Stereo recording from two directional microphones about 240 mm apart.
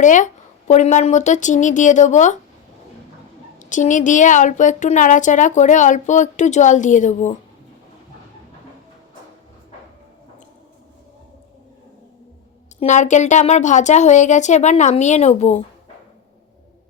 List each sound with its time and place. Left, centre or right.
0.0 s a woman's voice: left
3.6 s a woman's voice: left
12.8 s speech: left